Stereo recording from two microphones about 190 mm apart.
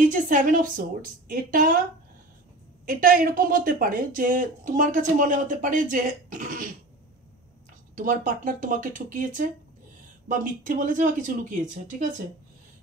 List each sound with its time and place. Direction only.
0.1 s speech: 45° right (ahead or behind)
2.9 s speech: 45° right (ahead or behind)
7.9 s speech: 45° right (ahead or behind)